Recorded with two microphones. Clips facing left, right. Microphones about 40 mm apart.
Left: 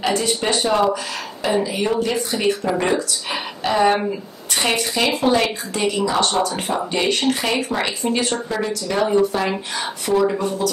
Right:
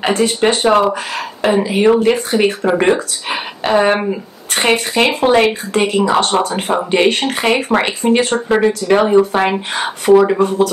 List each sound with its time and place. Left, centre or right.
0.0 s speech: right